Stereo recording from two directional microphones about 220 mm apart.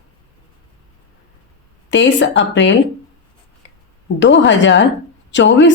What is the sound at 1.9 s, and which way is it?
Speech, 55° left (ahead or behind).